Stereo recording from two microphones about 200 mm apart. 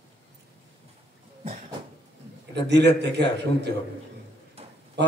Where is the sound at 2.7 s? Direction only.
60° right (ahead or behind).